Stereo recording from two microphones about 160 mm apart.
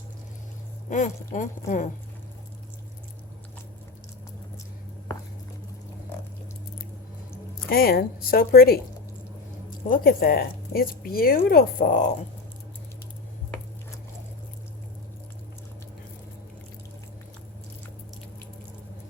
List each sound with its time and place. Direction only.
0.9 s speech: 50° left (ahead or behind)
7.7 s speech: 70° left (ahead or behind)